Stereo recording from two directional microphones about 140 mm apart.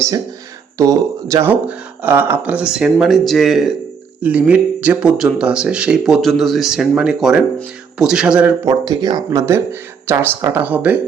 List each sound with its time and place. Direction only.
0.8 s speech: 20° right (ahead or behind)
8.6 s speech: 30° right (ahead or behind)
10.1 s speech: 15° right (ahead or behind)